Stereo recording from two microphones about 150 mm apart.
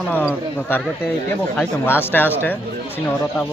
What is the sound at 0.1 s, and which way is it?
Speech, 10° left (ahead or behind).